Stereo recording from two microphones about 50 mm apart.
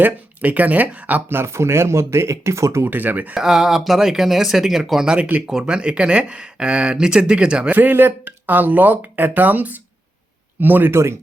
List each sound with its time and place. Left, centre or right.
0.0 s speech: right
1.4 s speech: right
2.8 s speech: right
3.3 s speech: centre
7.7 s speech: right
10.9 s speech: right